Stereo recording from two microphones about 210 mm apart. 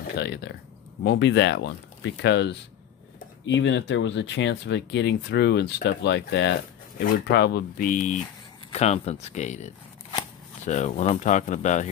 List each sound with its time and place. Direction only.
0.2 s speech: 55° left (ahead or behind); by 11.9 s 35° left (ahead or behind)